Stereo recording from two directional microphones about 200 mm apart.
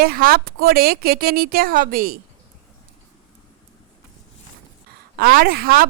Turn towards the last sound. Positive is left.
turn(degrees=-50)  # may be behind; listen again after turning